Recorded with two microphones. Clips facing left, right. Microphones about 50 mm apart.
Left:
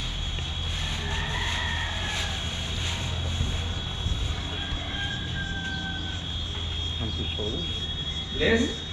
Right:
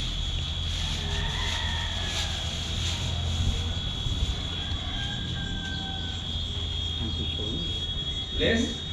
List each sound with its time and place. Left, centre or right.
1.1 s vehicle: left
8.4 s speech: centre